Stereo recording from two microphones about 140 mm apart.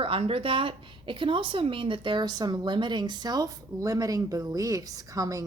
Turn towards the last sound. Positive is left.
turn(degrees=-25)  # may be behind; listen again after turning